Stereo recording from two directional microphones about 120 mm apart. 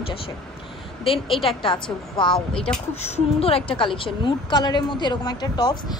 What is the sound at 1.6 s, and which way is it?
Speech, 45° left (ahead or behind).